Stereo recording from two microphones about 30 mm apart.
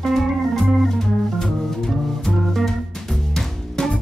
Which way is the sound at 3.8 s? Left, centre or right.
Left.